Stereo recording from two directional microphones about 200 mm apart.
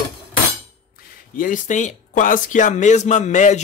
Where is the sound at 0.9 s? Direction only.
45° left (ahead or behind).